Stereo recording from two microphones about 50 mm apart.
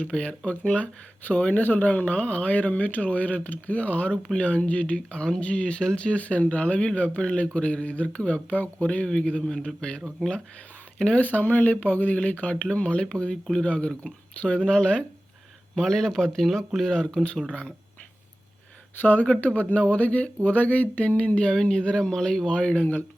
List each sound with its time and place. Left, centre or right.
0.0 s speech: left
4.9 s speech: centre
5.4 s speech: left
9.6 s speech: left
11.2 s speech: left; by 15.0 s centre
15.7 s speech: centre
19.0 s speech: left